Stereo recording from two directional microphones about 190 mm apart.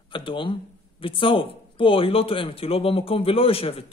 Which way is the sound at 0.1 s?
25° left (ahead or behind).